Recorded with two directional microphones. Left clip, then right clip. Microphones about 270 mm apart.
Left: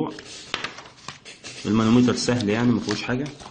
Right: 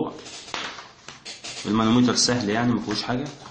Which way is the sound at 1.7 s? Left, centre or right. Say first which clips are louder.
Left 1 dB; left.